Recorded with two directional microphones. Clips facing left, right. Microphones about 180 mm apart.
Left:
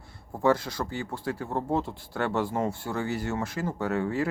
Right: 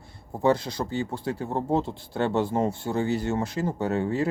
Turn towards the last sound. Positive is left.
turn(degrees=-25)  # may be behind; listen again after turning